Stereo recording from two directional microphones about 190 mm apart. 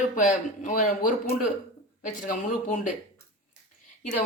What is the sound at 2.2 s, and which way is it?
Speech, 45° left (ahead or behind).